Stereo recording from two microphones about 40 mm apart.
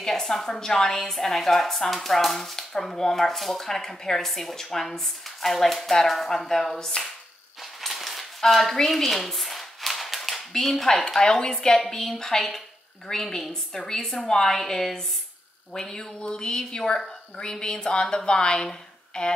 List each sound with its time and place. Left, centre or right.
0.0 s a woman's voice: centre
7.8 s a sound: centre
10.5 s a woman's voice: centre
11.1 s a woman's voice: centre